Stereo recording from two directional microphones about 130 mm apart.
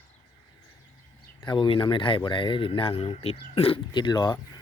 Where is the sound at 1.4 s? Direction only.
40° left (ahead or behind).